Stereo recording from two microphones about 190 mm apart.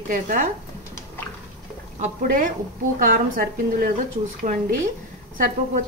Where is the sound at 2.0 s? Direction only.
45° right (ahead or behind).